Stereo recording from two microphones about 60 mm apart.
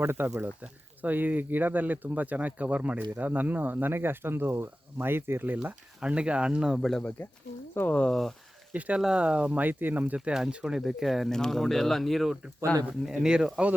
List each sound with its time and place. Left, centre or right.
0.0 s speech: right
6.0 s speech: centre
7.2 s speech: left
7.9 s speech: left
8.1 s speech: centre
8.7 s speech: right
9.0 s speech: centre; by 10.2 s right
10.2 s speech: centre
11.3 s speech: centre
12.6 s speech: left
12.9 s speech: centre
13.1 s speech: centre